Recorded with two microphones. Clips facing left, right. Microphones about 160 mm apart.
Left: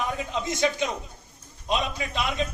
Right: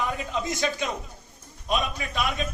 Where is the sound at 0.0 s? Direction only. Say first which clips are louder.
Even; 20° left (ahead or behind).